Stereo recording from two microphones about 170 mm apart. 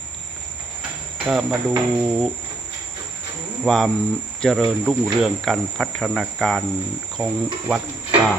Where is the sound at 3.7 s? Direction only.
Centre (ahead or behind).